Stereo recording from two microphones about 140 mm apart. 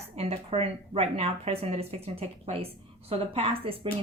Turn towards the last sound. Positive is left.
turn(degrees=-45)  # may be behind; listen again after turning